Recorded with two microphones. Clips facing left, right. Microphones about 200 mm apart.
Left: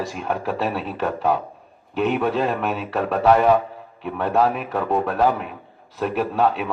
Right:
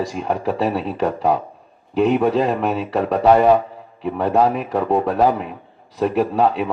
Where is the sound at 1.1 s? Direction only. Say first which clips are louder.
Even; centre (ahead or behind).